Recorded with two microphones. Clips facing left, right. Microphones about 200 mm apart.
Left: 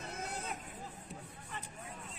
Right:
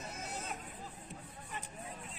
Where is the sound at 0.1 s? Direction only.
55° left (ahead or behind).